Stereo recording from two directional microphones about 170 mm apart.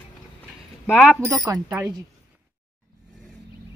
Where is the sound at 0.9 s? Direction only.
5° left (ahead or behind).